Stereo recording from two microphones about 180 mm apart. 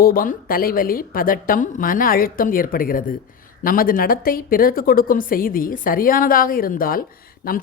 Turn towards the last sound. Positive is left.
turn(degrees=55)  # may be behind; listen again after turning